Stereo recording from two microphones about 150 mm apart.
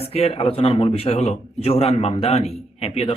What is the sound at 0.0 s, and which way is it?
A man's voice, 40° left (ahead or behind).